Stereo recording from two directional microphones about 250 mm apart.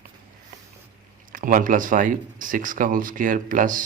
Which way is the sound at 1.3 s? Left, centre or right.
Right.